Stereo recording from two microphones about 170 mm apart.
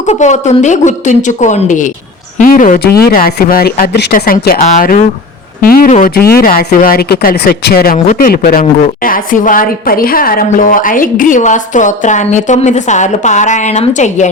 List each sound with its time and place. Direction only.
0.0 s a woman's voice: 45° left (ahead or behind)
3.0 s a woman's voice: 60° left (ahead or behind)
8.0 s speech: 50° left (ahead or behind)
9.0 s a woman's voice: 55° left (ahead or behind)